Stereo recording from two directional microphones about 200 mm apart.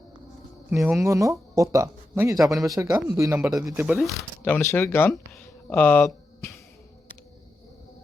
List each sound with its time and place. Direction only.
0.7 s speech: 5° right (ahead or behind)
1.0 s speech: 15° right (ahead or behind); by 6.6 s 15° left (ahead or behind)